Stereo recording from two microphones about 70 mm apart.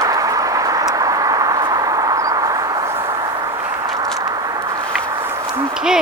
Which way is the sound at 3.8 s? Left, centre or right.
Right.